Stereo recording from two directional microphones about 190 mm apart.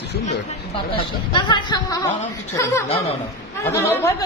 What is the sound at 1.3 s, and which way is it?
Speech, 25° left (ahead or behind).